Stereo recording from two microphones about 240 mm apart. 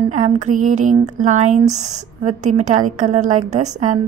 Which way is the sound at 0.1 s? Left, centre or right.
Right.